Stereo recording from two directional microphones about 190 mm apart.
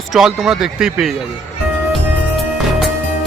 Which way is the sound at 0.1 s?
Centre (ahead or behind).